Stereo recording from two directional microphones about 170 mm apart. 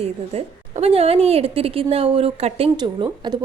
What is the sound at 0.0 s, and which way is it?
Speech, 35° right (ahead or behind).